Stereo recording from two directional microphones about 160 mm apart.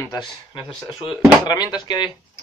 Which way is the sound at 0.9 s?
5° right (ahead or behind).